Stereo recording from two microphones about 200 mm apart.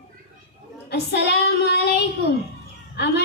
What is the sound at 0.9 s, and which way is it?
Child singing, 55° left (ahead or behind).